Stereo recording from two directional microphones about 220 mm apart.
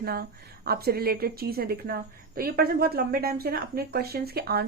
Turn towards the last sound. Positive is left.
turn(degrees=-45)  # may be behind; listen again after turning